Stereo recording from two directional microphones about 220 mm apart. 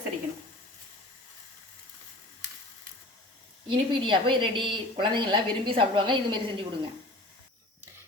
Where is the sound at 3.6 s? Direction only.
20° right (ahead or behind).